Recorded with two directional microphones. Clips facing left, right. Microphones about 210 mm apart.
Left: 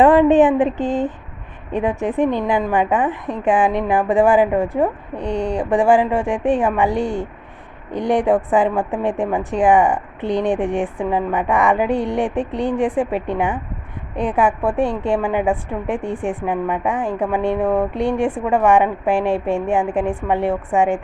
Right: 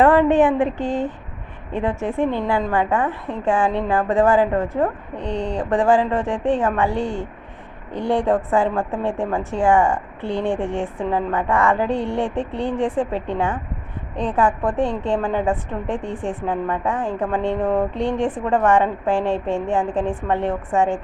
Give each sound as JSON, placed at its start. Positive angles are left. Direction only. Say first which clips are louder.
{"t": 0.0, "sound": "a woman's voice", "louder": "left 3 dB", "side_deg": 15}